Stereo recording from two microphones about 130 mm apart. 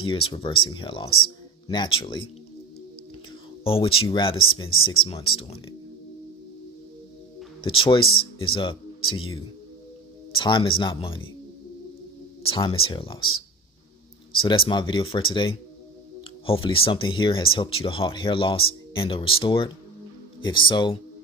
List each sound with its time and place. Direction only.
0.1 s speech: 40° left (ahead or behind)
3.6 s speech: 45° left (ahead or behind)
7.6 s speech: 40° left (ahead or behind)
10.3 s speech: 40° left (ahead or behind)
12.4 s speech: 45° left (ahead or behind)
14.4 s speech: 40° left (ahead or behind)